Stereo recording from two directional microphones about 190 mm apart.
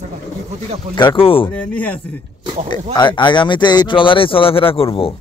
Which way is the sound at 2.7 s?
25° left (ahead or behind).